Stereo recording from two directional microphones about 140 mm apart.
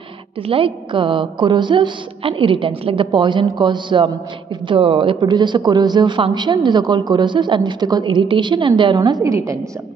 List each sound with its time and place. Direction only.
0.5 s speech: 40° right (ahead or behind); by 9.6 s 20° right (ahead or behind)